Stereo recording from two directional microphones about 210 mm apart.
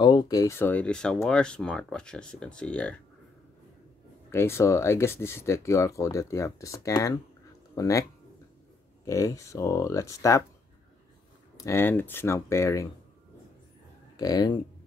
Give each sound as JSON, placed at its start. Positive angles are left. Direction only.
{"t": 0.0, "sound": "speech", "side_deg": 20}
{"t": 4.3, "sound": "speech", "side_deg": 10}
{"t": 9.0, "sound": "speech", "side_deg": 15}
{"t": 11.5, "sound": "speech", "side_deg": 15}
{"t": 14.1, "sound": "speech", "side_deg": 20}